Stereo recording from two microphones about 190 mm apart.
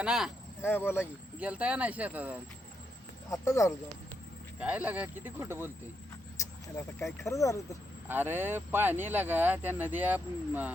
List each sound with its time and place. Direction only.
0.0 s speech: 5° right (ahead or behind)
0.6 s speech: 10° left (ahead or behind)
1.4 s speech: 5° right (ahead or behind)
3.2 s speech: 15° left (ahead or behind)
4.6 s speech: 5° right (ahead or behind)
6.3 s speech: 15° left (ahead or behind)
8.0 s speech: 10° right (ahead or behind)